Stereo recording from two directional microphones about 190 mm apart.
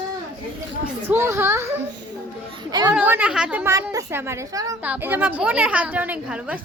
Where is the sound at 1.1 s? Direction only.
15° right (ahead or behind).